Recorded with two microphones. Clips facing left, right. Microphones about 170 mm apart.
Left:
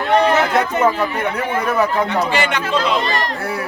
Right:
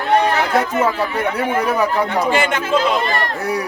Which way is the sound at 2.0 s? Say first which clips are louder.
Right 1 dB; 50° right (ahead or behind).